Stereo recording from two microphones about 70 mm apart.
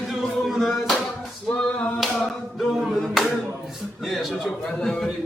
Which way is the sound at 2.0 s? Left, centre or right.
Centre.